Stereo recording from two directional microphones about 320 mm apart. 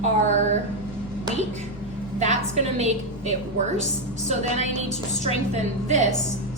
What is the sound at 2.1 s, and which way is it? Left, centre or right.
A woman's voice, right.